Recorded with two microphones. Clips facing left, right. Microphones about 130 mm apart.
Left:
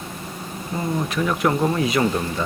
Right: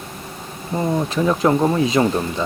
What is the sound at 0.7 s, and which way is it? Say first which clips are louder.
Speech: right 4 dB; 30° right (ahead or behind).